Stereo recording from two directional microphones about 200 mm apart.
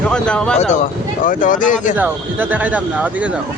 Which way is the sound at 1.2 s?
40° left (ahead or behind).